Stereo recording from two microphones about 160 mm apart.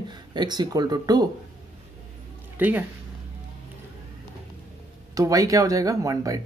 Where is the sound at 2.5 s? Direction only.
10° right (ahead or behind).